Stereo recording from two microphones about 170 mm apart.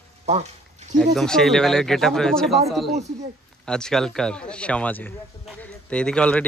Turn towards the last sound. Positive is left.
turn(degrees=5)  # may be behind; listen again after turning